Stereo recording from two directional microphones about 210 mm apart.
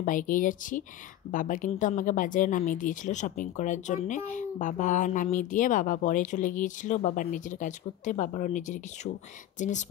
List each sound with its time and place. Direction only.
0.0 s speech: 40° left (ahead or behind)